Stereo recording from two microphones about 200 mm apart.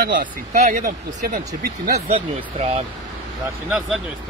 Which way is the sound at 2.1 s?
30° right (ahead or behind).